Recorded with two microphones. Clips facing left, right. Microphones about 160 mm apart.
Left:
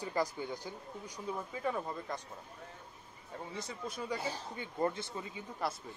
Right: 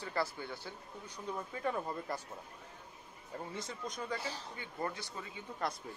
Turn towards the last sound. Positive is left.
turn(degrees=5)  # may be behind; listen again after turning